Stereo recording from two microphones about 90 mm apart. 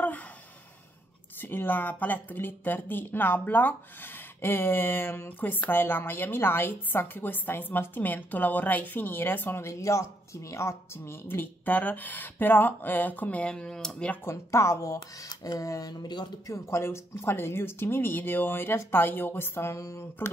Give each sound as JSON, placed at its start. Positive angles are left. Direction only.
{"t": 1.4, "sound": "speech", "side_deg": 20}
{"t": 14.2, "sound": "speech", "side_deg": 35}
{"t": 15.0, "sound": "speech", "side_deg": 50}
{"t": 16.5, "sound": "speech", "side_deg": 30}